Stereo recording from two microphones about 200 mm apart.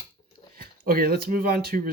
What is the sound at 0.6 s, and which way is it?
Speech, 50° right (ahead or behind).